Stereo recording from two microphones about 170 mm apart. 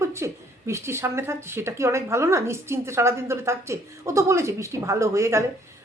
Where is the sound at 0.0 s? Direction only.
15° right (ahead or behind).